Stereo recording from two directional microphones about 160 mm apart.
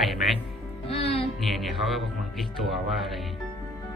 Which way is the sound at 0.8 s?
40° left (ahead or behind).